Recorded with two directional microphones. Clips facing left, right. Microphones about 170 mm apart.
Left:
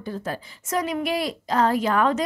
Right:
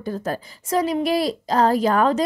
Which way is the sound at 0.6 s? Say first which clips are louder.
Right 4 dB; 30° right (ahead or behind).